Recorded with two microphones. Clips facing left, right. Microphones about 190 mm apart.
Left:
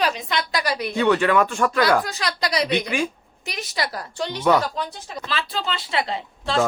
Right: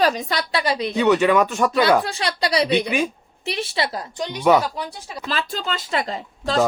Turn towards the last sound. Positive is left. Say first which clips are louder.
# right 1 dB
turn(degrees=-40)  # may be behind; listen again after turning